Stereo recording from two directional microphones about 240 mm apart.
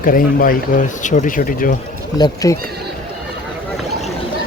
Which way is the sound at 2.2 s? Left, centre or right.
Centre.